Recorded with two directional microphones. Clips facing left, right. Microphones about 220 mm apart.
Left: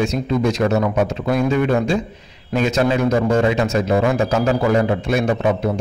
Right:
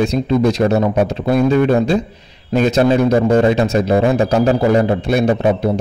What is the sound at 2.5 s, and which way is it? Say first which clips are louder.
A man's voice: right 5 dB; 35° right (ahead or behind).